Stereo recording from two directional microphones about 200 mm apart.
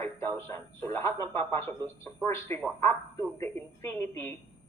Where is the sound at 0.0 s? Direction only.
15° left (ahead or behind).